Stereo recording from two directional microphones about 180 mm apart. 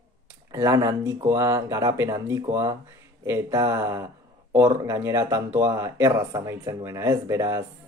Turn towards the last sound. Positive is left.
turn(degrees=-15)  # may be behind; listen again after turning